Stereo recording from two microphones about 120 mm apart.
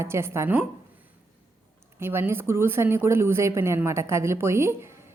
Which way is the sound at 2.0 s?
20° right (ahead or behind).